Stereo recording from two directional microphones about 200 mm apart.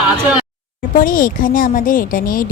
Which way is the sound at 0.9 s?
45° left (ahead or behind).